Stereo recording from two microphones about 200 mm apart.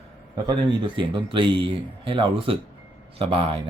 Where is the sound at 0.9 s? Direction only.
25° right (ahead or behind).